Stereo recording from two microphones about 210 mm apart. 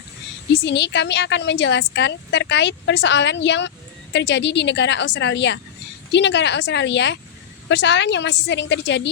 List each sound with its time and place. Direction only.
0.6 s a woman's voice: 55° left (ahead or behind)